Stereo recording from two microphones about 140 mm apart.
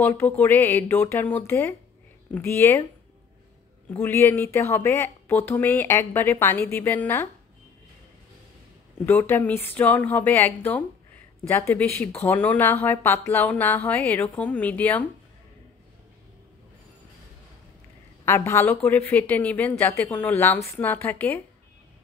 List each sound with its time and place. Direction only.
0.0 s speech: 15° left (ahead or behind)
3.9 s speech: 15° left (ahead or behind)
8.9 s speech: 15° left (ahead or behind)
18.2 s speech: 20° left (ahead or behind)